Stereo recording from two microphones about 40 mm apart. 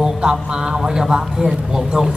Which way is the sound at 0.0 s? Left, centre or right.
Right.